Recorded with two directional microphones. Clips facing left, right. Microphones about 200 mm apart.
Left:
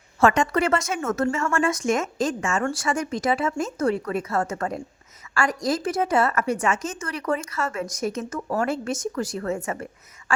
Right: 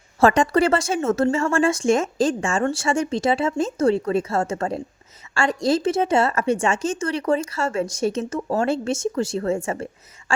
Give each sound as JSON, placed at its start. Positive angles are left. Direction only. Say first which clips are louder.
{"t": 0.2, "sound": "a woman's voice", "louder": "right 3 dB", "side_deg": -35}